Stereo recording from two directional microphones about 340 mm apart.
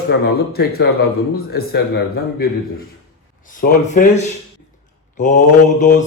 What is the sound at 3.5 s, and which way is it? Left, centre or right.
Mantra, left.